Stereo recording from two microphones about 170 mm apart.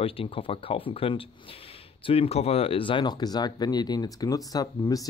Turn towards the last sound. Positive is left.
turn(degrees=20)  # may be behind; listen again after turning